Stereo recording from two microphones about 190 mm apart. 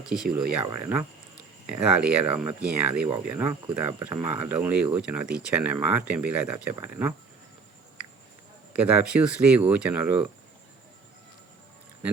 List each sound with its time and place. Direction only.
0.1 s speech: 50° right (ahead or behind)
0.6 s speech: 15° right (ahead or behind)
8.7 s speech: 5° right (ahead or behind)